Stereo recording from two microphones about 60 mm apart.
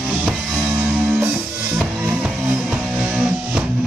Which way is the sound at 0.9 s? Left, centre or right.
Centre.